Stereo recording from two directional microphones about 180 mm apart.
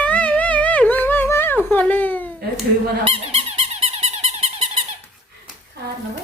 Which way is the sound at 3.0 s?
35° right (ahead or behind).